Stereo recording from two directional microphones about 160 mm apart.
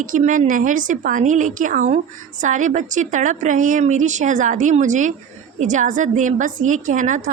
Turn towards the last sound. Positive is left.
turn(degrees=-50)  # may be behind; listen again after turning